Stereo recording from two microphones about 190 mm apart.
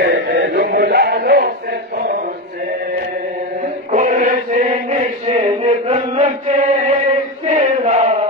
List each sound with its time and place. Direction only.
0.0 s music: 60° right (ahead or behind)
3.9 s chant: 45° right (ahead or behind)